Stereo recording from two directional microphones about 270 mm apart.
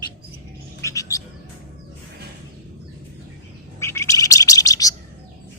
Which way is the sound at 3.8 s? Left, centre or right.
Centre.